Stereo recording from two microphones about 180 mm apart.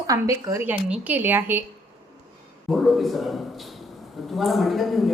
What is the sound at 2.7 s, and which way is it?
A man's voice, centre (ahead or behind).